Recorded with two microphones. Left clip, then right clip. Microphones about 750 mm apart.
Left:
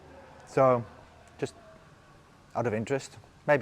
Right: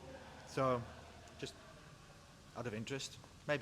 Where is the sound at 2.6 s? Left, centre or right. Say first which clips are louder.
Left 15 dB; left.